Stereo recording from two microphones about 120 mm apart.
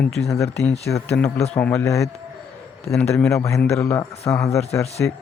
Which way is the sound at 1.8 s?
25° left (ahead or behind).